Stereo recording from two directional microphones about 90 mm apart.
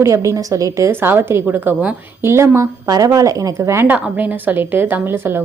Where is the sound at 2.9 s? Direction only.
40° right (ahead or behind).